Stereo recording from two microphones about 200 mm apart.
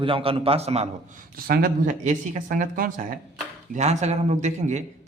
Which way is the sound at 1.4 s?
50° right (ahead or behind).